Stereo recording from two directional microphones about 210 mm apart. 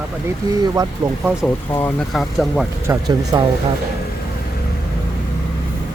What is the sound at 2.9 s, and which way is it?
Speech, 15° right (ahead or behind).